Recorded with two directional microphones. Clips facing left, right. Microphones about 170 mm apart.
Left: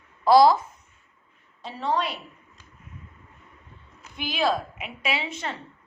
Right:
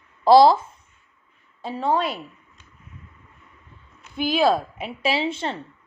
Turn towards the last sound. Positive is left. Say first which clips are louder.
# right 6 dB
turn(degrees=-30)  # may be behind; listen again after turning